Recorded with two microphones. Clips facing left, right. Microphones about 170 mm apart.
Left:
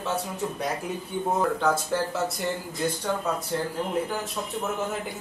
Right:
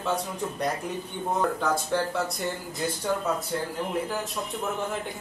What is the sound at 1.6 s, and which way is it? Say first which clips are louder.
Speech: left 1 dB; centre (ahead or behind).